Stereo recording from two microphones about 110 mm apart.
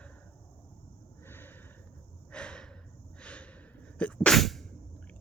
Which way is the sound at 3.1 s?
10° left (ahead or behind).